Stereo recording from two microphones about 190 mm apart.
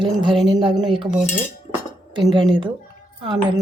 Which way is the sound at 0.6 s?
25° right (ahead or behind).